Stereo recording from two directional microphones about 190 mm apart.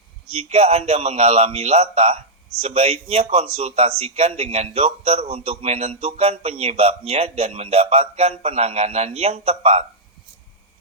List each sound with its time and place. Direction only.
0.4 s a man's voice: 35° right (ahead or behind)